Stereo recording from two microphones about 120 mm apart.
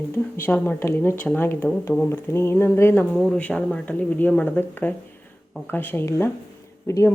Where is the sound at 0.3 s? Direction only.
15° left (ahead or behind).